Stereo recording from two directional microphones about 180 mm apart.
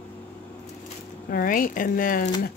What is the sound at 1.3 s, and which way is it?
Speech, 50° left (ahead or behind).